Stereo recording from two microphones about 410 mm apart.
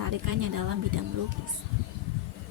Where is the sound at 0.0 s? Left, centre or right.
Right.